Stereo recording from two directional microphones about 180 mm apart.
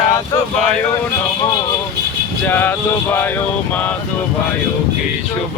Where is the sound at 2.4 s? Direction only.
10° left (ahead or behind).